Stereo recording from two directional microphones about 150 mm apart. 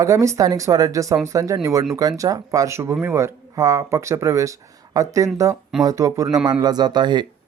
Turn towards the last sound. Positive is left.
turn(degrees=-30)  # may be behind; listen again after turning